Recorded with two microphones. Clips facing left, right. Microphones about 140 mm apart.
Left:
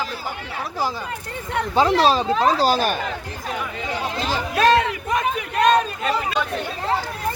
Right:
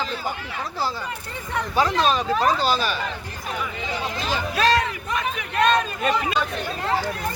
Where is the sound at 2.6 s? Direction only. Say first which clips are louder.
Left 4 dB; 45° left (ahead or behind).